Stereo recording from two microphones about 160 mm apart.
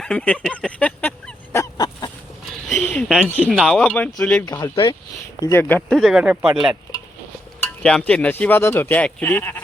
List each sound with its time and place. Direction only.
0.0 s speech: 5° left (ahead or behind)
1.5 s a sound: 20° left (ahead or behind)
2.5 s a sound: centre (ahead or behind)
2.8 s a sound: 10° left (ahead or behind)
3.2 s speech: 10° left (ahead or behind)
3.5 s speech: centre (ahead or behind)
4.4 s speech: 25° left (ahead or behind)
5.4 s speech: 15° left (ahead or behind)
6.0 s speech: 5° right (ahead or behind)
7.6 s speech: 5° left (ahead or behind)